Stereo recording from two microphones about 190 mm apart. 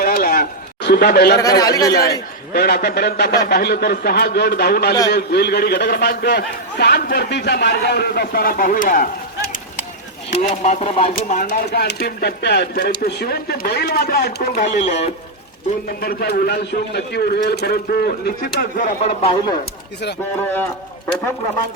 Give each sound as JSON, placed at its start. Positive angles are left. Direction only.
{"t": 0.0, "sound": "a sound", "side_deg": 50}
{"t": 1.4, "sound": "speech", "side_deg": 20}
{"t": 1.9, "sound": "a man's voice", "side_deg": 55}
{"t": 10.3, "sound": "speech", "side_deg": 35}
{"t": 11.3, "sound": "a man's voice", "side_deg": 55}
{"t": 15.9, "sound": "a man's voice", "side_deg": 55}
{"t": 20.4, "sound": "speech", "side_deg": 10}